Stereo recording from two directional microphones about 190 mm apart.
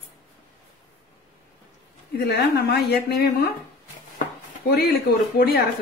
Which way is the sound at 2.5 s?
55° left (ahead or behind).